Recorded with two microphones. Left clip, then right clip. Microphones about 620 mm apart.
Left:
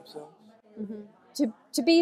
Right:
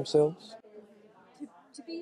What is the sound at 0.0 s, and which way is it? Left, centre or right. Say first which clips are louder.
Speech: right 19 dB; right.